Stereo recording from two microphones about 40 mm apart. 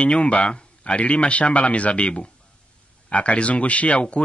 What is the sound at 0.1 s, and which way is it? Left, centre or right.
A man's voice, left.